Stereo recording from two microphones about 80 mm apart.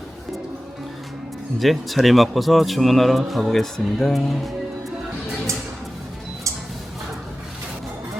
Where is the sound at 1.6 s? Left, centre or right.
Centre.